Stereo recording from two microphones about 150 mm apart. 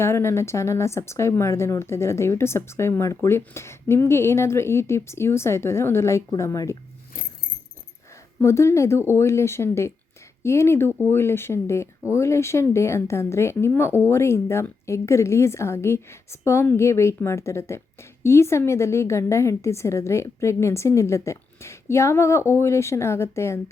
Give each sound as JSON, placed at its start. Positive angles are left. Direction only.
{"t": 0.0, "sound": "speech", "side_deg": 15}
{"t": 8.4, "sound": "a woman's voice", "side_deg": 20}